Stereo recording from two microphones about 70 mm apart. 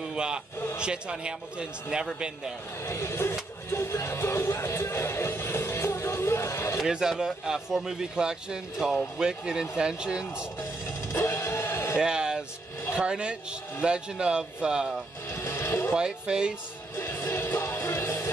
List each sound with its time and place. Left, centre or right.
0.1 s a sound: centre
0.7 s a man's voice: centre
2.8 s speech: left
3.7 s music: left
6.8 s a man's voice: centre
10.6 s music: left
12.0 s music: centre
12.9 s a man's voice: centre
15.3 s a sound: left
15.9 s a man's voice: centre
16.9 s music: left